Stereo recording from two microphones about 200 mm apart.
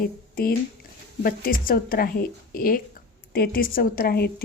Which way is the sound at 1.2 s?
45° left (ahead or behind).